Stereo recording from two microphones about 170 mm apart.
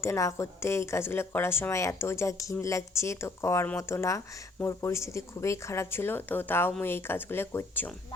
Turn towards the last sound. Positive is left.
turn(degrees=15)  # may be behind; listen again after turning